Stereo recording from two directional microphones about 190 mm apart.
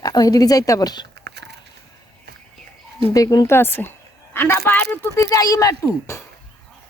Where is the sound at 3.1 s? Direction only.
20° left (ahead or behind).